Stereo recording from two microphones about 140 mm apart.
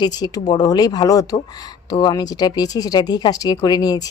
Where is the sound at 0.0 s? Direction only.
30° left (ahead or behind).